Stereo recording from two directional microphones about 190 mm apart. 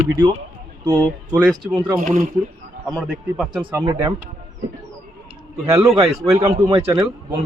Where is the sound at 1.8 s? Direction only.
15° right (ahead or behind).